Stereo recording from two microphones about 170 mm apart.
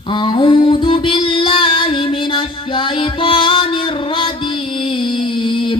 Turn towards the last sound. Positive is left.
turn(degrees=30)  # may be behind; listen again after turning